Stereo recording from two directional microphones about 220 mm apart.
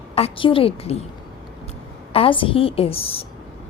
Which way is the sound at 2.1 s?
25° left (ahead or behind).